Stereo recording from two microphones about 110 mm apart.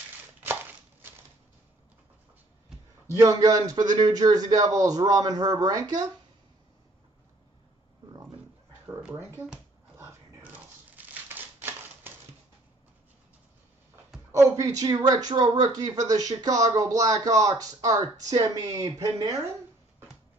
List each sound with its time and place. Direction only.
3.2 s speech: 30° right (ahead or behind)
9.1 s speech: 20° right (ahead or behind)
10.4 s crumpling: 15° right (ahead or behind)
14.3 s speech: 30° right (ahead or behind)